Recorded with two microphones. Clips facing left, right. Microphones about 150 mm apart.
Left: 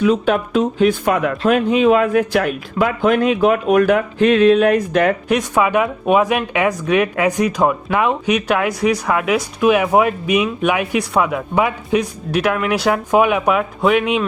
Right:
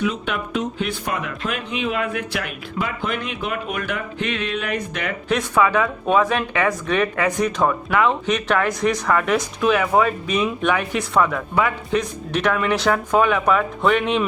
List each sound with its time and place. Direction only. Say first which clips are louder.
0.0 s speech: left 9 dB; 40° left (ahead or behind)
5.3 s speech: left 3 dB; 15° left (ahead or behind)